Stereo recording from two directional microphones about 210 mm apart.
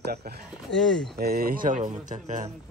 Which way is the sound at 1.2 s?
45° right (ahead or behind).